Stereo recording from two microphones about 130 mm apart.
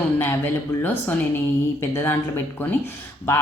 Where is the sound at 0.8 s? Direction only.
15° left (ahead or behind).